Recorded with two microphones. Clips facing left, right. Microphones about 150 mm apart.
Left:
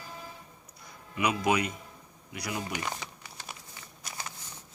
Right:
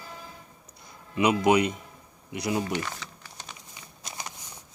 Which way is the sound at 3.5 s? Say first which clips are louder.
Right 1 dB; 20° right (ahead or behind).